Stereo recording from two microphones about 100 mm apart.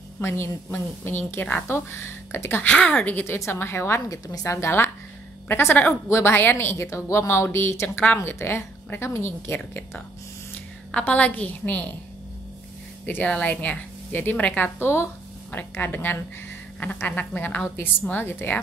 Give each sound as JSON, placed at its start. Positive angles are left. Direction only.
{"t": 0.2, "sound": "a woman's voice", "side_deg": 25}
{"t": 10.9, "sound": "speech", "side_deg": 10}
{"t": 13.0, "sound": "a woman's voice", "side_deg": 15}